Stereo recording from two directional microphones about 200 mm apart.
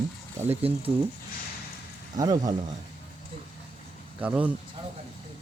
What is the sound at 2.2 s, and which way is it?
Speech, 20° right (ahead or behind).